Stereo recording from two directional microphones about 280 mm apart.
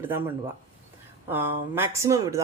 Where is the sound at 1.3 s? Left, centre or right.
Centre.